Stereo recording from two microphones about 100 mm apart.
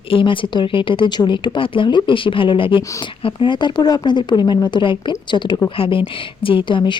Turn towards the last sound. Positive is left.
turn(degrees=50)  # may be behind; listen again after turning